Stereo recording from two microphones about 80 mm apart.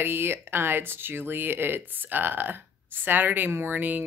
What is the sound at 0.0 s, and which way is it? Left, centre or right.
Speech, right.